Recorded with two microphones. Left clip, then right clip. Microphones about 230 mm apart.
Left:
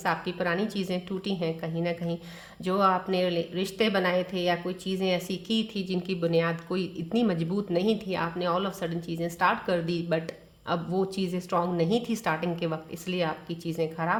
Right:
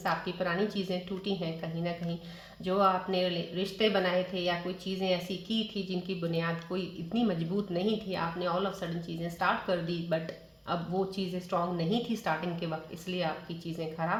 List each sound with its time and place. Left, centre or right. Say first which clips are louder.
0.0 s a woman's voice: left 3 dB; left